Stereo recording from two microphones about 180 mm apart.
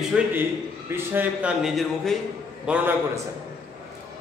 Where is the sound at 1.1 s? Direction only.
10° right (ahead or behind).